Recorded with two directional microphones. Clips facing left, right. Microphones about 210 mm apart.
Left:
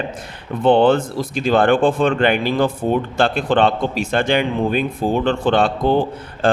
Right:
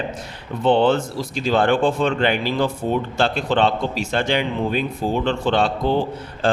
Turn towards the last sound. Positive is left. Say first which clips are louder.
# left 3 dB
turn(degrees=55)  # may be behind; listen again after turning